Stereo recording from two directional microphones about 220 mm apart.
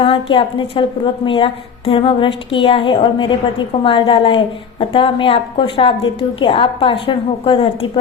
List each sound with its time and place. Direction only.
0.0 s a woman's voice: 25° left (ahead or behind)